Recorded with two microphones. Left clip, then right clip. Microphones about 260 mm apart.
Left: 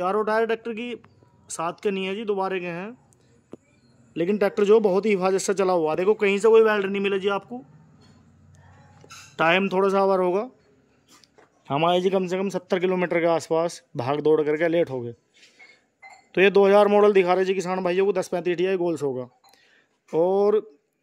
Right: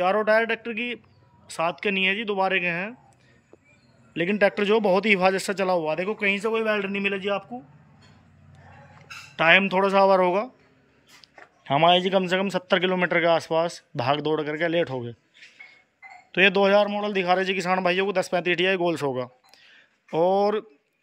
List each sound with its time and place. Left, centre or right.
0.0 s a man's voice: centre
4.1 s a man's voice: centre
9.3 s a man's voice: centre
11.6 s a man's voice: centre
16.3 s a man's voice: centre